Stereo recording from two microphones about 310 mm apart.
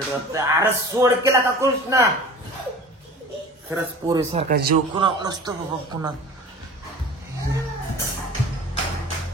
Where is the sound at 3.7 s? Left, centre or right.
Centre.